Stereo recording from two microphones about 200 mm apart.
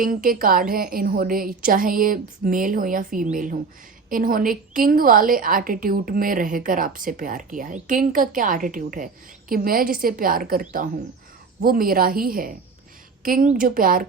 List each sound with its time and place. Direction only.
0.0 s a woman's voice: 45° right (ahead or behind)